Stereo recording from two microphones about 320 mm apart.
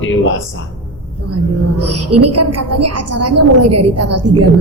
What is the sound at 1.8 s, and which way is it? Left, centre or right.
A woman's voice, right.